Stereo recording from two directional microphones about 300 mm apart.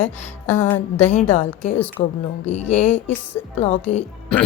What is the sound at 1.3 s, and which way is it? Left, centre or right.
A woman's voice, left.